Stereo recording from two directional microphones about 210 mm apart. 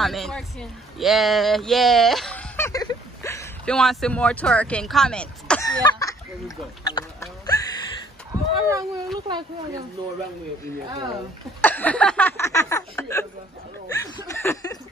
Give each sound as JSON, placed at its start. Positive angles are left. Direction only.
{"t": 0.0, "sound": "speech", "side_deg": 0}
{"t": 5.7, "sound": "fowl", "side_deg": 15}
{"t": 8.3, "sound": "speech", "side_deg": -15}
{"t": 11.6, "sound": "speech", "side_deg": 10}